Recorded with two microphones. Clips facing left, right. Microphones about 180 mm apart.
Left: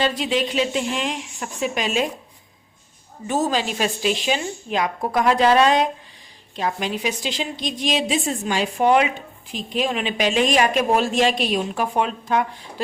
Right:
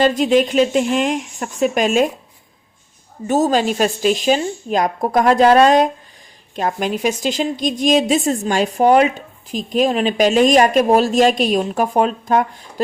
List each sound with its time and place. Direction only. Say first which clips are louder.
0.0 s a woman's voice: right 8 dB; 45° right (ahead or behind)
3.2 s a woman's voice: right 6 dB; 40° right (ahead or behind)